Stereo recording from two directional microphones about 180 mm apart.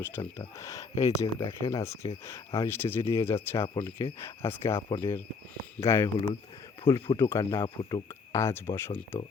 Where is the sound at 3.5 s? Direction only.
30° left (ahead or behind).